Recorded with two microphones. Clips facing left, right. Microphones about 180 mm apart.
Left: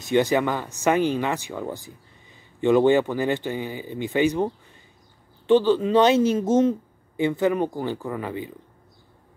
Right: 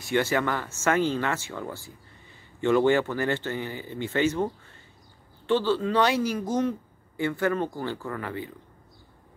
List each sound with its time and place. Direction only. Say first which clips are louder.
0.0 s speech: left 5 dB; 20° left (ahead or behind)
5.5 s speech: left 6 dB; 20° left (ahead or behind)